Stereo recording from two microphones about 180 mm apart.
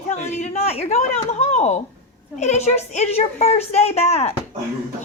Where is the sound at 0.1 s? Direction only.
40° left (ahead or behind).